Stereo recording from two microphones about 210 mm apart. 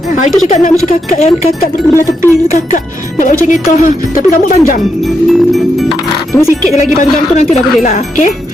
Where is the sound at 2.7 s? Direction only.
40° left (ahead or behind).